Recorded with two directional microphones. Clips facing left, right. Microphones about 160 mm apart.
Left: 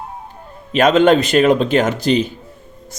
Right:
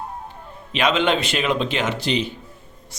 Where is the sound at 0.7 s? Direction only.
45° left (ahead or behind).